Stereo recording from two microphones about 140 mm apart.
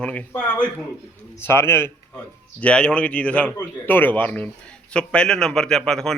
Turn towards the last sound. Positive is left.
turn(degrees=5)  # may be behind; listen again after turning